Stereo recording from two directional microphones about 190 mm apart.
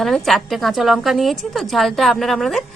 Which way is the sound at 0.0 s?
Centre (ahead or behind).